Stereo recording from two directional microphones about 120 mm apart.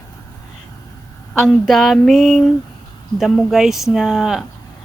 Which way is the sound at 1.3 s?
5° left (ahead or behind).